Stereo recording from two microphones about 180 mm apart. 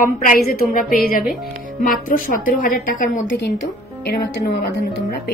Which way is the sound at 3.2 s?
80° left.